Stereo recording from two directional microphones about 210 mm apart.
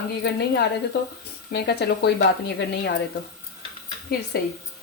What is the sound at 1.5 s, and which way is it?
Speech, 50° left (ahead or behind).